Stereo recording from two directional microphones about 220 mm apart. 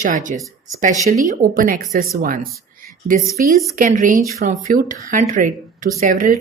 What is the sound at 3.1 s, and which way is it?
Speech, 40° right (ahead or behind).